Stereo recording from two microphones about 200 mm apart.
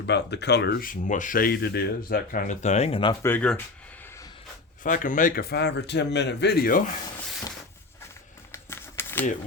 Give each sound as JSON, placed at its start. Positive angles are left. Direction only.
{"t": 0.0, "sound": "speech", "side_deg": 55}
{"t": 3.2, "sound": "speech", "side_deg": 5}
{"t": 4.8, "sound": "speech", "side_deg": 40}
{"t": 8.5, "sound": "a sound", "side_deg": 10}